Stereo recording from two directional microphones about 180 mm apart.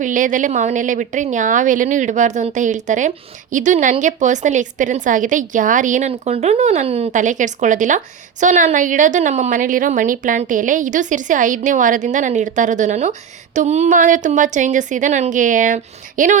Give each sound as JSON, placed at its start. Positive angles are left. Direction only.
{"t": 0.0, "sound": "a woman's voice", "side_deg": -45}